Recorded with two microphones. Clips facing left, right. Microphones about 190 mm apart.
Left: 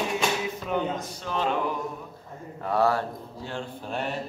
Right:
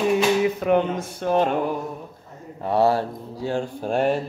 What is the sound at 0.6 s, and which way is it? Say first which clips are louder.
Speech: right 8 dB; 60° right (ahead or behind).